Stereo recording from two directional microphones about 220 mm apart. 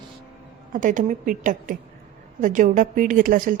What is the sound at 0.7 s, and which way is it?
A woman's voice, 35° right (ahead or behind).